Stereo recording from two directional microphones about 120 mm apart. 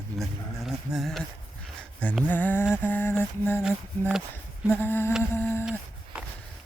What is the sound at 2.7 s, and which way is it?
Mantra, 15° left (ahead or behind).